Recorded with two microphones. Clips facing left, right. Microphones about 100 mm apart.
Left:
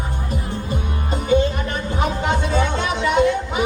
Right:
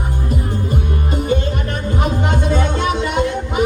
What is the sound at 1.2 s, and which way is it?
Music, 50° right (ahead or behind).